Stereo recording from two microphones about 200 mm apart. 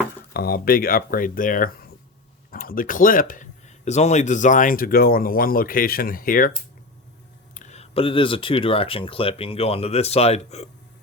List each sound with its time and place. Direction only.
0.3 s speech: 50° left (ahead or behind)
7.5 s speech: 35° left (ahead or behind)